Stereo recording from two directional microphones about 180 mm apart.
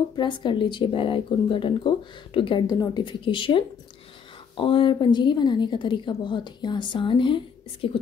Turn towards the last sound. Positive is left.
turn(degrees=30)  # may be behind; listen again after turning